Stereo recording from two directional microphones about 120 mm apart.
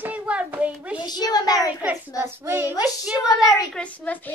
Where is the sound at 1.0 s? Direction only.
35° left (ahead or behind).